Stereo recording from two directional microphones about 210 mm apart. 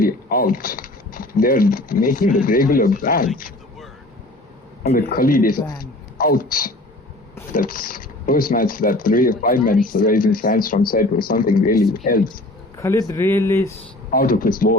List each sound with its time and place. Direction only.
0.0 s speech: 45° left (ahead or behind)
4.8 s a woman's voice: 45° left (ahead or behind)
12.3 s speech: 15° left (ahead or behind)
14.1 s speech: 45° left (ahead or behind)